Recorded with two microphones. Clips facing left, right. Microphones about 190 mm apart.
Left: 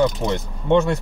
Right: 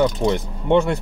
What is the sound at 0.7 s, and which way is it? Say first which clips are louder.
Speech: even; 15° right (ahead or behind).